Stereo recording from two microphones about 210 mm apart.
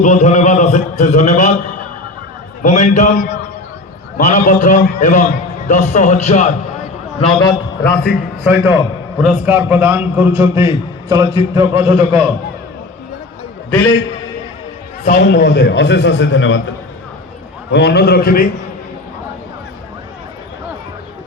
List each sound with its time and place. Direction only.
0.0 s a man's voice: 35° left (ahead or behind)
2.6 s a man's voice: 35° left (ahead or behind)
7.2 s a man's voice: 20° left (ahead or behind)
8.5 s a man's voice: 10° right (ahead or behind)
13.7 s a man's voice: 10° left (ahead or behind)
15.2 s a man's voice: 55° left (ahead or behind)
17.7 s a man's voice: 50° left (ahead or behind)